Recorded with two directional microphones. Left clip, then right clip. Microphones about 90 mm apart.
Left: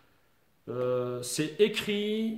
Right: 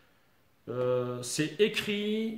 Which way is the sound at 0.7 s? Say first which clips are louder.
Even; 30° left (ahead or behind).